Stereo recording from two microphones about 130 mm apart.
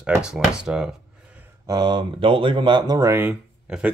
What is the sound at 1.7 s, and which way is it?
Speech, 35° right (ahead or behind).